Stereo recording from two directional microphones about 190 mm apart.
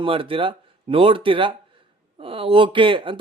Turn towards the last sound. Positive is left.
turn(degrees=-25)  # may be behind; listen again after turning